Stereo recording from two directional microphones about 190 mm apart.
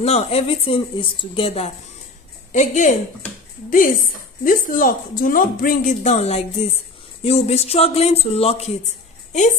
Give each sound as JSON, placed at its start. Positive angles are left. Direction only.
{"t": 0.0, "sound": "a woman's voice", "side_deg": 30}